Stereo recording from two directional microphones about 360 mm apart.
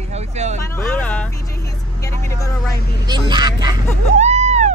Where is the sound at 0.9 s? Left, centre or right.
Centre.